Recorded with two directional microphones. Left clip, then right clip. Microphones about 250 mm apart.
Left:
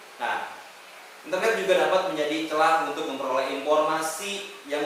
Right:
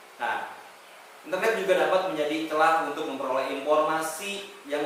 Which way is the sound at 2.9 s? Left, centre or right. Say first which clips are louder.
Left 1 dB; right.